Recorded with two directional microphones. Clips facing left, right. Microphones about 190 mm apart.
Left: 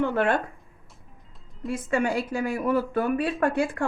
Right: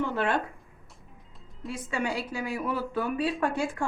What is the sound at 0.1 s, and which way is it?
Speech, 55° left (ahead or behind).